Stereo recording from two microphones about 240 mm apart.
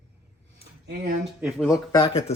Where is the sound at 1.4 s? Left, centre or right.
Centre.